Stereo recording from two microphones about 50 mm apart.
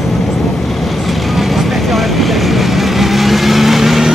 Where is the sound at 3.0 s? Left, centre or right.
Centre.